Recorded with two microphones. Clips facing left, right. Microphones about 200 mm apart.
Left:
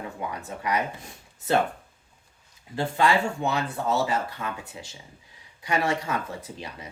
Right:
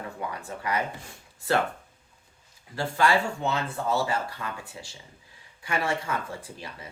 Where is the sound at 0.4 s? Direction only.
20° left (ahead or behind).